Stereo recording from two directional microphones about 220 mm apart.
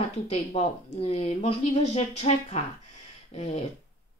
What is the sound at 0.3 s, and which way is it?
A woman's voice, 30° left (ahead or behind).